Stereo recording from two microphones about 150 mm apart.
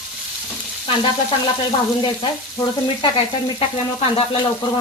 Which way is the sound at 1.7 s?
30° left (ahead or behind).